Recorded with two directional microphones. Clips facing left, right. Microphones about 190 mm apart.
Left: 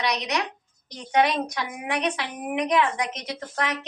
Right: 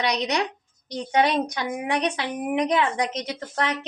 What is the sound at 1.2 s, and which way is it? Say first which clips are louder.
A woman's voice: right 1 dB; 35° right (ahead or behind).